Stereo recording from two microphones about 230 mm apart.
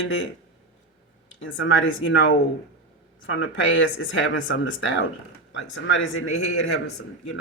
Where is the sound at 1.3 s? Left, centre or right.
Left.